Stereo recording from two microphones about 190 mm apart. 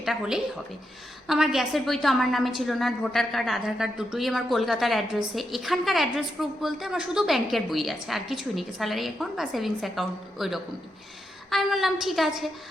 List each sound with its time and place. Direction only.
0.0 s a woman's voice: 5° right (ahead or behind)